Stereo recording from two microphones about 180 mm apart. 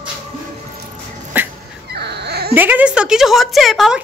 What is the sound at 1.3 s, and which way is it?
Dog, 10° right (ahead or behind).